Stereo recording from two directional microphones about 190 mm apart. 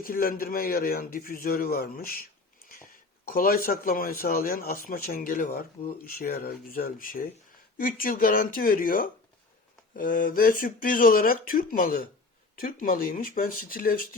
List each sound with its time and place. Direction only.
0.0 s speech: 50° left (ahead or behind)
3.2 s speech: 50° left (ahead or behind)